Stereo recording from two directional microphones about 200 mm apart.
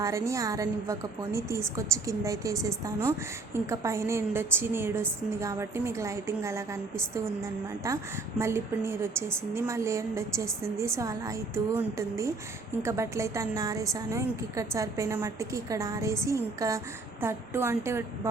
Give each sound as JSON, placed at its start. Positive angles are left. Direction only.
{"t": 0.0, "sound": "a woman's voice", "side_deg": -15}
{"t": 7.9, "sound": "a woman's voice", "side_deg": -15}